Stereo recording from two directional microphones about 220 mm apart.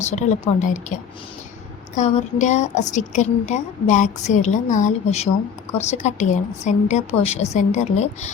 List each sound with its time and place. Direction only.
0.0 s a woman's voice: 30° left (ahead or behind)
2.0 s a woman's voice: 30° left (ahead or behind)